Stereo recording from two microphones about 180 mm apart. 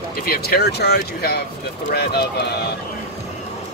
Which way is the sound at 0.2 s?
55° left (ahead or behind).